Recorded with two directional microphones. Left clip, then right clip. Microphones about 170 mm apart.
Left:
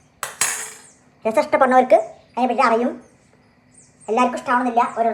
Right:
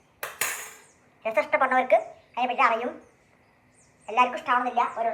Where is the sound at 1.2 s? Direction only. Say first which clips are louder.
Left 7 dB; 55° left (ahead or behind).